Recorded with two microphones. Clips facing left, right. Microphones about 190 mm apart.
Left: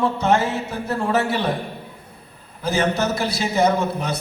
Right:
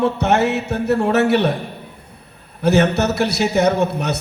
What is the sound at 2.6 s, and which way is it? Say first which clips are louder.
Speech: right 5 dB; 65° right (ahead or behind).